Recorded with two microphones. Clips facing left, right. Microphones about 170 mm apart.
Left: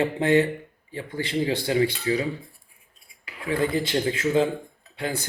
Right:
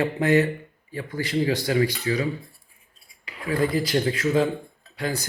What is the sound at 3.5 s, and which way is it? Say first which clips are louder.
Speech: right 1 dB; 25° left (ahead or behind).